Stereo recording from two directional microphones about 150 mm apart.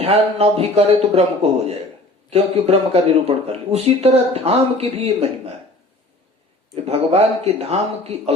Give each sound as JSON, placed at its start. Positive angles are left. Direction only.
{"t": 0.0, "sound": "speech", "side_deg": -45}
{"t": 6.7, "sound": "speech", "side_deg": -45}